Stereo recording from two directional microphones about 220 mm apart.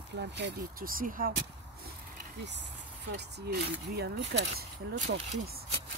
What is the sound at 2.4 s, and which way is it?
Speech, 50° right (ahead or behind).